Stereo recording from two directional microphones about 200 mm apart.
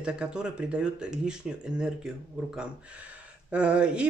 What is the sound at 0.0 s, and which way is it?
Speech, 5° right (ahead or behind).